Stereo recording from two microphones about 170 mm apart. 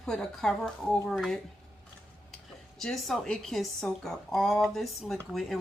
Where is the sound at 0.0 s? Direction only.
5° left (ahead or behind).